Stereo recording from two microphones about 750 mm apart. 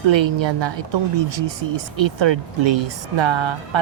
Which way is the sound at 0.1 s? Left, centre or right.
Right.